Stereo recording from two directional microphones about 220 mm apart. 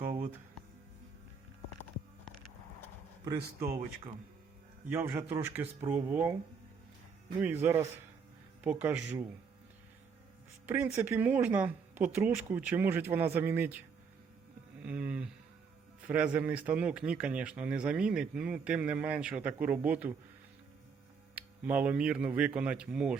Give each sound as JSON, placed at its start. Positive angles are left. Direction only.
{"t": 3.2, "sound": "speech", "side_deg": -15}
{"t": 4.9, "sound": "speech", "side_deg": -10}
{"t": 7.3, "sound": "speech", "side_deg": -10}
{"t": 10.7, "sound": "speech", "side_deg": -10}
{"t": 21.3, "sound": "speech", "side_deg": -5}